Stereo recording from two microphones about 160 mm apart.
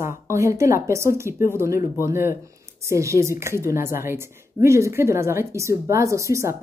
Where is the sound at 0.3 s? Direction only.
20° right (ahead or behind).